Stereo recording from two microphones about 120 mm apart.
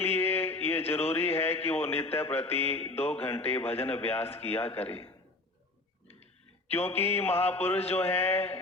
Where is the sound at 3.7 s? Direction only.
15° left (ahead or behind).